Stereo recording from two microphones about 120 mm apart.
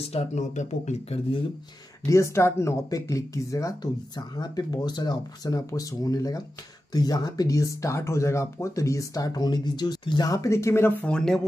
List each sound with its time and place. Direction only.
0.0 s speech: 60° left (ahead or behind)
2.0 s speech: 25° left (ahead or behind)
11.1 s speech: 5° left (ahead or behind)